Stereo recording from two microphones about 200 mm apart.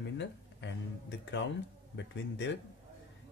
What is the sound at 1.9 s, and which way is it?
Speech, 60° left (ahead or behind).